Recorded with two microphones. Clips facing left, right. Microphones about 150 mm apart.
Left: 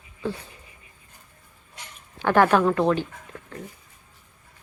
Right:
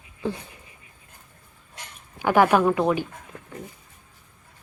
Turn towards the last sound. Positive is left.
turn(degrees=-10)  # may be behind; listen again after turning